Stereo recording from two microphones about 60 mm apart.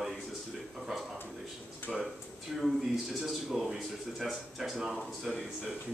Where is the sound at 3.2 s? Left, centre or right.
Centre.